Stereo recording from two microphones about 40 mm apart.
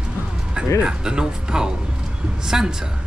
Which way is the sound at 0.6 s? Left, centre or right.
Right.